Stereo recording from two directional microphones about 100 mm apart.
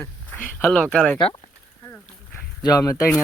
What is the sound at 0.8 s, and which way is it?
Speech, 10° left (ahead or behind).